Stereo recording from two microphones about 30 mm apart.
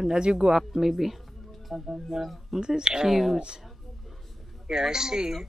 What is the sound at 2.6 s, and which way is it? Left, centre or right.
Speech, right.